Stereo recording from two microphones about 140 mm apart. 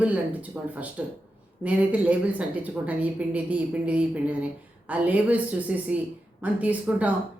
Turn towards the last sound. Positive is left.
turn(degrees=-10)  # may be behind; listen again after turning